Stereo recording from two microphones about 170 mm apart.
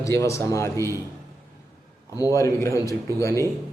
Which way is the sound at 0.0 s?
15° left (ahead or behind).